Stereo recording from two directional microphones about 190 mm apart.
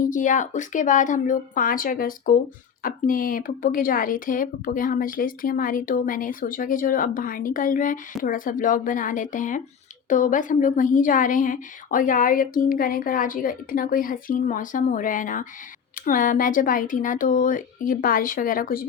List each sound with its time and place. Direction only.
0.0 s speech: 45° left (ahead or behind)